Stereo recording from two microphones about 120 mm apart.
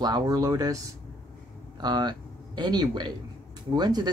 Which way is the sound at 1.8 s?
35° right (ahead or behind).